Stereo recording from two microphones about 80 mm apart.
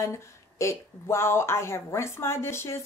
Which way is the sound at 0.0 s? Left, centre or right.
Left.